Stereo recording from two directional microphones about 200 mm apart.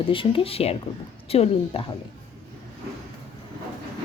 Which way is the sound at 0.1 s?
25° left (ahead or behind).